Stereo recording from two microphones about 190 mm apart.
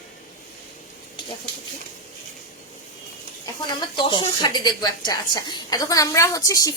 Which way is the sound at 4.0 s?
25° left (ahead or behind).